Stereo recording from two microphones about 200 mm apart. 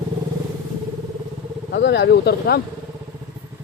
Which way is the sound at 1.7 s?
60° left (ahead or behind).